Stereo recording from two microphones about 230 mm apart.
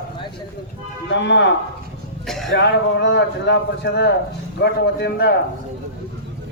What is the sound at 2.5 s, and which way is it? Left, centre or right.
Speech, left.